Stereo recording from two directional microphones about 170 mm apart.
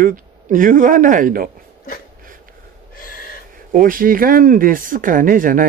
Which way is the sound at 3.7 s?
55° right (ahead or behind).